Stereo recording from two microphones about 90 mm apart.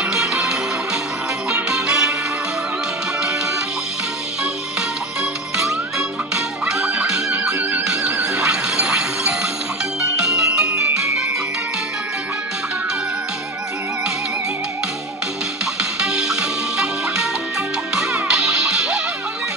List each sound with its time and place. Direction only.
0.0 s music: 5° right (ahead or behind)
5.7 s music: 5° right (ahead or behind)
10.7 s music: 25° right (ahead or behind)
15.8 s music: 5° right (ahead or behind)